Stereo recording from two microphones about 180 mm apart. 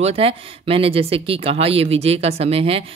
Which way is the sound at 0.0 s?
35° right (ahead or behind).